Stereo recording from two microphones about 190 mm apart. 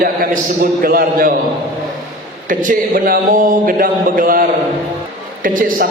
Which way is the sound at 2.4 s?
45° right (ahead or behind).